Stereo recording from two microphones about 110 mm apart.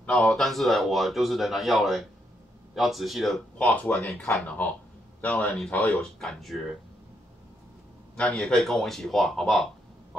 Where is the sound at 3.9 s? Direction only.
20° left (ahead or behind).